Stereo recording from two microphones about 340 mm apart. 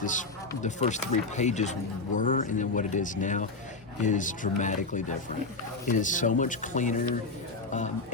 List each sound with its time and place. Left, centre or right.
0.0 s speech: left